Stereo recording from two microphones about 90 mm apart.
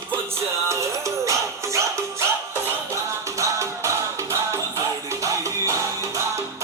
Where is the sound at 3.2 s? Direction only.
35° right (ahead or behind).